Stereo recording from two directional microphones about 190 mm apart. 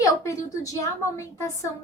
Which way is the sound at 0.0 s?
15° left (ahead or behind).